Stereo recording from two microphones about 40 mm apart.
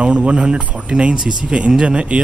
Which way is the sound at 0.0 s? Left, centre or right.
Right.